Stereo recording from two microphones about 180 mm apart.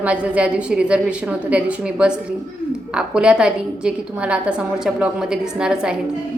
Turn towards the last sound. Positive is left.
turn(degrees=-5)  # may be behind; listen again after turning